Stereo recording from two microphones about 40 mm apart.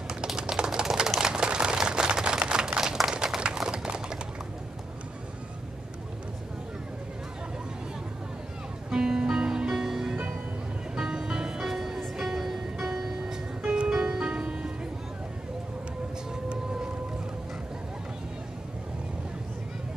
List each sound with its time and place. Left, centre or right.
0.1 s typewriter: centre
8.9 s music: centre